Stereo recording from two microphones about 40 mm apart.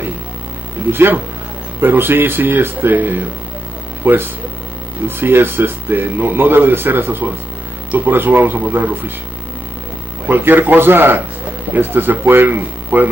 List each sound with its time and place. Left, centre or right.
0.9 s speech: right
10.2 s speech: right